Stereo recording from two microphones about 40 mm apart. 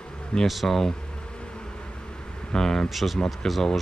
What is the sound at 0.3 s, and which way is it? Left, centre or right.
Speech, left.